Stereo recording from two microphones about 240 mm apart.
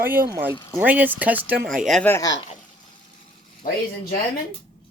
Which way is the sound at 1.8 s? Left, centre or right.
Centre.